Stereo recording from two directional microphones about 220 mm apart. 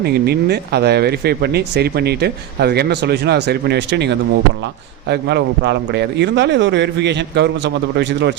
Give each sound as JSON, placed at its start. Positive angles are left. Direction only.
{"t": 0.0, "sound": "speech", "side_deg": -45}